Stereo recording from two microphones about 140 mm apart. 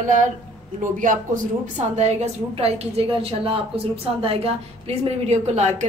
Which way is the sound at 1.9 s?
50° right (ahead or behind).